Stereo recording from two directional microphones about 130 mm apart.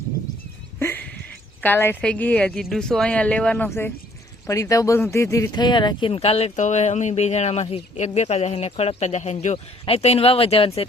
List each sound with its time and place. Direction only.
0.8 s a sound: 15° left (ahead or behind)
1.6 s a woman's voice: 15° left (ahead or behind); by 9.6 s 60° left (ahead or behind)
9.8 s speech: 50° left (ahead or behind)